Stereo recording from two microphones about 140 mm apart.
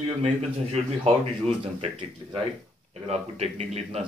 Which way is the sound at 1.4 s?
40° right (ahead or behind).